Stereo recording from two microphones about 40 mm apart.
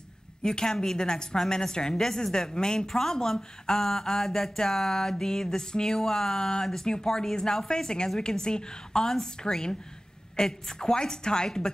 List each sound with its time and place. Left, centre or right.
0.4 s a woman's voice: centre